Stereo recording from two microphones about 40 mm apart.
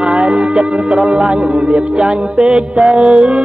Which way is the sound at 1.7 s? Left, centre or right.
Right.